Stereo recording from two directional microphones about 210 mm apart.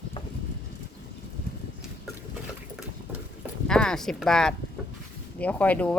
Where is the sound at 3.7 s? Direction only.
5° left (ahead or behind).